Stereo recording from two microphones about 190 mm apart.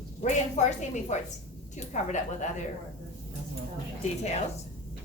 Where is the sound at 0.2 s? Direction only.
40° left (ahead or behind).